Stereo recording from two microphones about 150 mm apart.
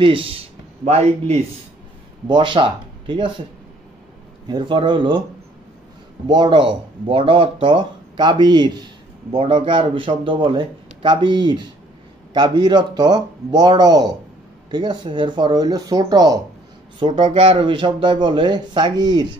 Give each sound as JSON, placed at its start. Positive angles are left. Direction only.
{"t": 0.0, "sound": "a man's voice", "side_deg": -35}
{"t": 2.2, "sound": "speech", "side_deg": -35}
{"t": 4.5, "sound": "speech", "side_deg": -30}
{"t": 6.2, "sound": "speech", "side_deg": -30}
{"t": 17.2, "sound": "speech", "side_deg": -40}